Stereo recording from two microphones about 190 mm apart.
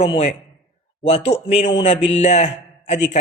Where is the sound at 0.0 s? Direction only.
30° left (ahead or behind).